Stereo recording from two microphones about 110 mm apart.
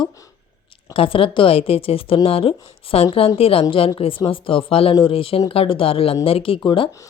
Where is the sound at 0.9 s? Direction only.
55° left (ahead or behind).